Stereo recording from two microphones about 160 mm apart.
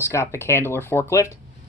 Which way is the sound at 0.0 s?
15° left (ahead or behind).